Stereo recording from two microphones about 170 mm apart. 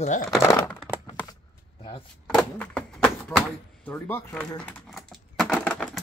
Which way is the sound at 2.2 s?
5° left (ahead or behind).